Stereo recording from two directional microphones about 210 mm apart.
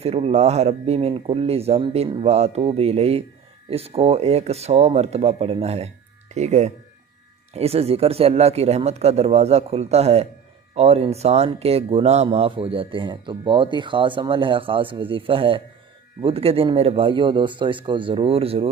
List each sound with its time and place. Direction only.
0.0 s speech: 30° right (ahead or behind)